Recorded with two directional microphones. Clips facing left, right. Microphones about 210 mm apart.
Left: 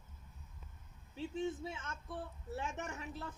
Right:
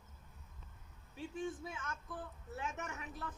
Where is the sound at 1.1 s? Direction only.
25° left (ahead or behind).